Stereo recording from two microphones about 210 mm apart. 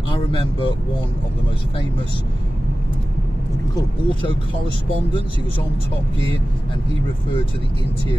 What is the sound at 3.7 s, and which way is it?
Speech, 25° left (ahead or behind).